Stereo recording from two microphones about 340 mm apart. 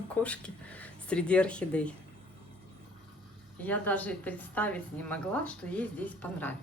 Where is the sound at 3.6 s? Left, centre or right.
Centre.